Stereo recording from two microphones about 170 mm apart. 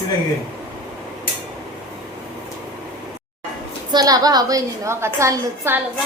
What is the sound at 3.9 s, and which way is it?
A woman's voice, 25° right (ahead or behind).